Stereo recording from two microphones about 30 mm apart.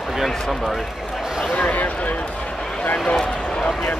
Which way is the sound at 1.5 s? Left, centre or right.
Left.